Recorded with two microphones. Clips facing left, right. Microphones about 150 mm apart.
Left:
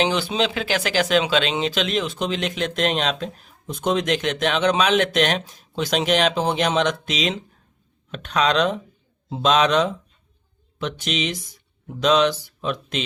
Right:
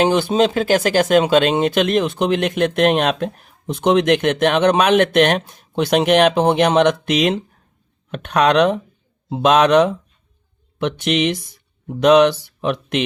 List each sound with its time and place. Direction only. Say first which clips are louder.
0.0 s speech: right 6 dB; 50° right (ahead or behind)